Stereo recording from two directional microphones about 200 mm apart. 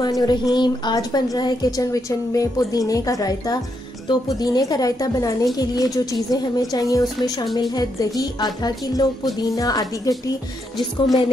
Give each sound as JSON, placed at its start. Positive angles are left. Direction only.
{"t": 0.0, "sound": "a woman's voice", "side_deg": 20}